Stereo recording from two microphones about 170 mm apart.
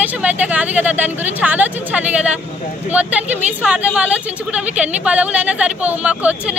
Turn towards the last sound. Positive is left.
turn(degrees=-5)  # may be behind; listen again after turning